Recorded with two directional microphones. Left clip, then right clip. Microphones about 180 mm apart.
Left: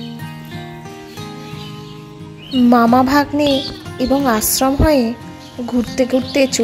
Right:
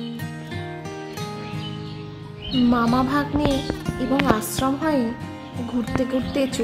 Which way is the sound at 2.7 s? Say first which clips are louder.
Left 11 dB; 35° left (ahead or behind).